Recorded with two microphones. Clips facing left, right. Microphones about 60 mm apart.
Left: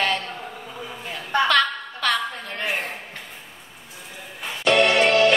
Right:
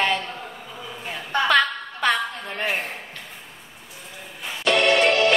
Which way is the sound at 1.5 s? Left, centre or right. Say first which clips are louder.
Right 1 dB; centre.